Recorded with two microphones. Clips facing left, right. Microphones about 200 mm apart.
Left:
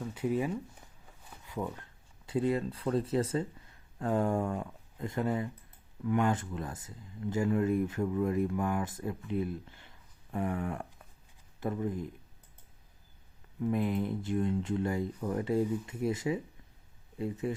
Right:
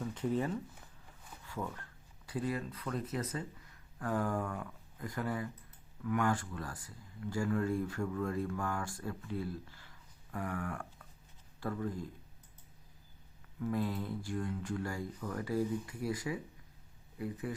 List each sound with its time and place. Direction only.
0.0 s speech: 10° left (ahead or behind)
13.6 s speech: 20° left (ahead or behind)